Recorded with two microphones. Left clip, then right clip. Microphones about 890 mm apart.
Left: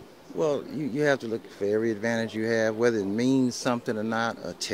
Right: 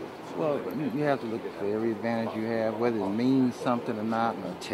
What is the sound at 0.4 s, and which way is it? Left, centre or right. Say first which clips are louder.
Speech: left 2 dB; left.